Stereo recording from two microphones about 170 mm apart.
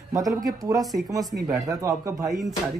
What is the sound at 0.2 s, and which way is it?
Speech, centre (ahead or behind).